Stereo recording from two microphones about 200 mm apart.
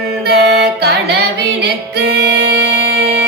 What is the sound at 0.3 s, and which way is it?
Music, 50° right (ahead or behind).